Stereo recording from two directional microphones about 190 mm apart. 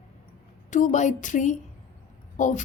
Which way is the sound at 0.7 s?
40° left (ahead or behind).